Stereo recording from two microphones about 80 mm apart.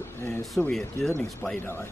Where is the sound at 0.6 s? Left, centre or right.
Centre.